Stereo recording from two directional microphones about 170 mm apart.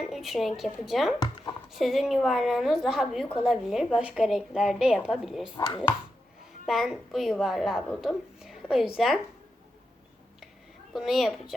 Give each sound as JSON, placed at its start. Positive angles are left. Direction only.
{"t": 0.1, "sound": "a woman's voice", "side_deg": 0}
{"t": 5.5, "sound": "speech", "side_deg": 20}
{"t": 6.7, "sound": "a woman's voice", "side_deg": 0}
{"t": 10.9, "sound": "a woman's voice", "side_deg": 0}